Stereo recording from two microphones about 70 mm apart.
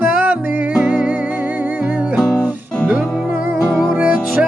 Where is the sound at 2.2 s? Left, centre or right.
Left.